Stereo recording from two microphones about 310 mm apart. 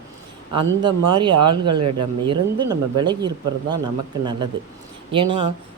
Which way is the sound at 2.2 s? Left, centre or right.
Centre.